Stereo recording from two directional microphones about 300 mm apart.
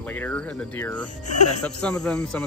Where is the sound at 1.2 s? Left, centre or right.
Left.